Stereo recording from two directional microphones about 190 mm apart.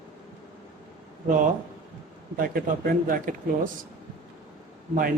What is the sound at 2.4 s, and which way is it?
Speech, 50° right (ahead or behind).